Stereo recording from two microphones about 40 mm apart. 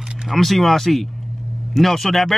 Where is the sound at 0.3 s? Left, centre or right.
Centre.